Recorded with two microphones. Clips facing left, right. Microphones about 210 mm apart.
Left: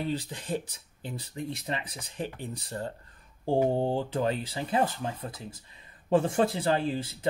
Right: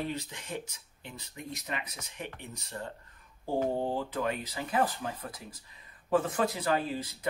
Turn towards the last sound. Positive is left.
turn(degrees=30)  # may be behind; listen again after turning